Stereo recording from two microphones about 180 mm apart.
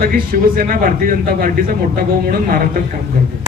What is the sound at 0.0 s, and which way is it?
Speech, 55° right (ahead or behind).